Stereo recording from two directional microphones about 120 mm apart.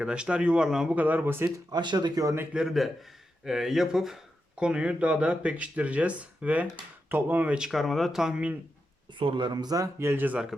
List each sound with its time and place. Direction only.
0.0 s speech: 10° right (ahead or behind)
1.5 s speech: 35° right (ahead or behind)
2.5 s speech: 5° right (ahead or behind)
9.1 s speech: 45° right (ahead or behind); by 10.5 s 10° right (ahead or behind)